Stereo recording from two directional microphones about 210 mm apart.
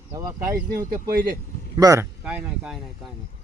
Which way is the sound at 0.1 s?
15° right (ahead or behind).